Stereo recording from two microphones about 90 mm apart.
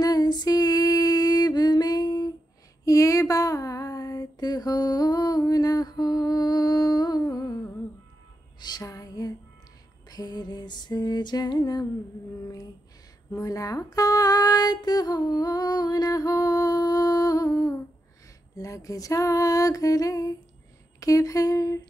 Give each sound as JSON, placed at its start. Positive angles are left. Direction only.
{"t": 0.0, "sound": "female singing", "side_deg": 45}
{"t": 2.8, "sound": "a sound", "side_deg": 35}
{"t": 8.5, "sound": "music", "side_deg": 50}
{"t": 10.0, "sound": "lullaby", "side_deg": 45}
{"t": 13.3, "sound": "a sound", "side_deg": 40}
{"t": 18.6, "sound": "female singing", "side_deg": 40}